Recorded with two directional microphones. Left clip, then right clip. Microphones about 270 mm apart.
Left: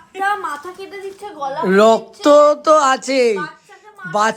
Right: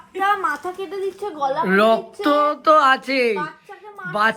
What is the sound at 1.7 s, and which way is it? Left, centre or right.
Speech, centre.